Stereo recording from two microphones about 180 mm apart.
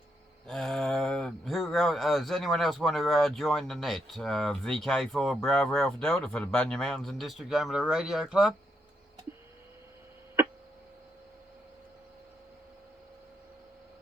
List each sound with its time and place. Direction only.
0.4 s speech: centre (ahead or behind)